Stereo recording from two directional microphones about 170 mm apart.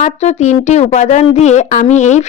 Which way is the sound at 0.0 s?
40° left (ahead or behind).